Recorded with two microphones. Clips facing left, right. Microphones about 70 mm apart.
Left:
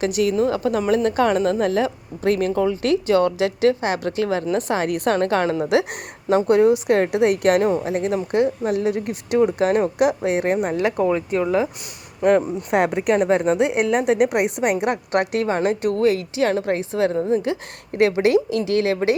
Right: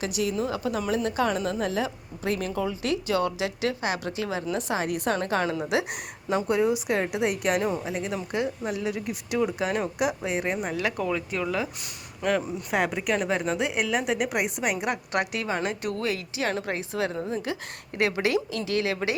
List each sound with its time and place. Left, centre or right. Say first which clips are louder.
0.0 s a woman's voice: left 8 dB; left